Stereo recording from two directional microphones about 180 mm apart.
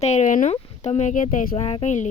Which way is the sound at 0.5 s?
40° left (ahead or behind).